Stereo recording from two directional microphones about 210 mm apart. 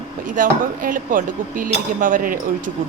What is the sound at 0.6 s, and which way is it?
Speech, 40° right (ahead or behind).